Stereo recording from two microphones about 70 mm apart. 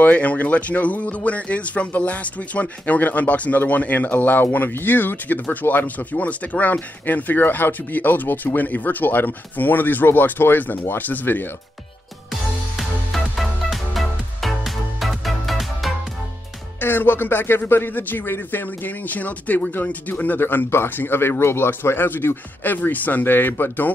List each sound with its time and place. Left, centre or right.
0.0 s speech: left
12.3 s music: centre
16.8 s speech: left